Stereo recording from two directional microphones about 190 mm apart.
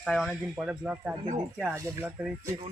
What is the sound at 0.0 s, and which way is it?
Speech, centre (ahead or behind).